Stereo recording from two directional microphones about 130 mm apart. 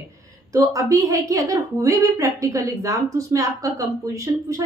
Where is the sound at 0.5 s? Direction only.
25° right (ahead or behind).